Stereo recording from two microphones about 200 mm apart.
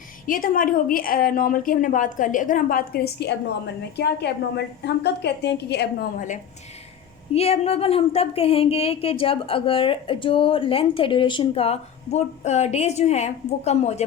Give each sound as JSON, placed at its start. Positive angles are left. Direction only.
{"t": 0.3, "sound": "a woman's voice", "side_deg": 45}